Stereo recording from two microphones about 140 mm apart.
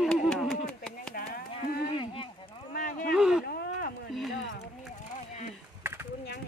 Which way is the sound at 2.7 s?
75° left (ahead or behind).